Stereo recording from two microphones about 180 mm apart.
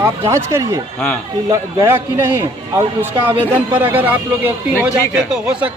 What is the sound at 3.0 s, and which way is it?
A man's voice, 10° right (ahead or behind).